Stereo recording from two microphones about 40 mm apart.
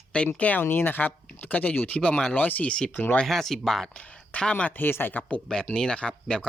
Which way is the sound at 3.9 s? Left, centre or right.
Left.